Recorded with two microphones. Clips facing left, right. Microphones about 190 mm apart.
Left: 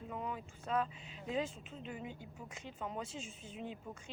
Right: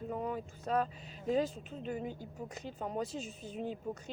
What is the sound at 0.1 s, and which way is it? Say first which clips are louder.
Speech: right 5 dB; 40° right (ahead or behind).